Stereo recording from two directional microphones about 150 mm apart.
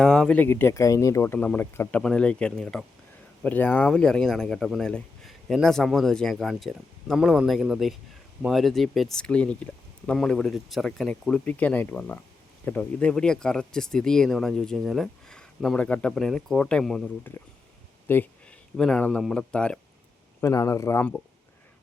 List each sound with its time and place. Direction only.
0.0 s speech: 5° left (ahead or behind)
20.4 s speech: 20° left (ahead or behind)